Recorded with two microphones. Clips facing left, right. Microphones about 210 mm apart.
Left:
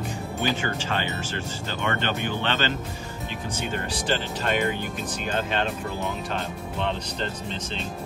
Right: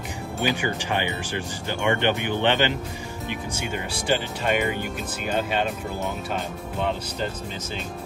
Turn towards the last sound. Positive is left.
turn(degrees=-5)  # may be behind; listen again after turning